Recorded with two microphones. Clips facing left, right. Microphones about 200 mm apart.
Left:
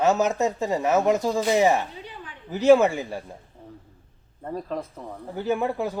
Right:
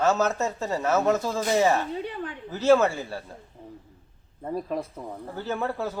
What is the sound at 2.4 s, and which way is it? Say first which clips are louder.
Speech: left 3 dB; 15° left (ahead or behind).